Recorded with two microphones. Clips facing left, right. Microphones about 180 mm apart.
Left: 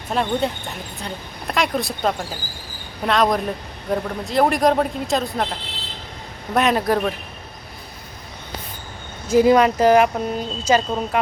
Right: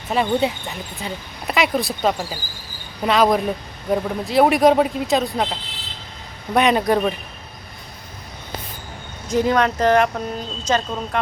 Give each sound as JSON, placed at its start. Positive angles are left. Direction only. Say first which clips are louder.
{"t": 0.1, "sound": "speech", "louder": "right 2 dB", "side_deg": -5}
{"t": 9.3, "sound": "speech", "louder": "left 4 dB", "side_deg": 10}